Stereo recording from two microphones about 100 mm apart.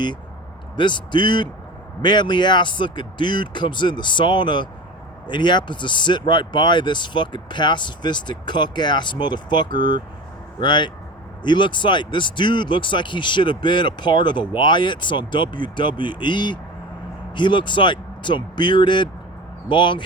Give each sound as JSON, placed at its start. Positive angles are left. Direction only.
{"t": 0.8, "sound": "speech", "side_deg": 50}